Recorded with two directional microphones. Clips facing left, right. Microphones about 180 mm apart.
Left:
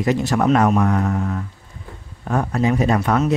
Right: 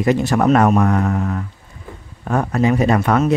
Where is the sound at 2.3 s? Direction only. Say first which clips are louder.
Right 2 dB; 65° right (ahead or behind).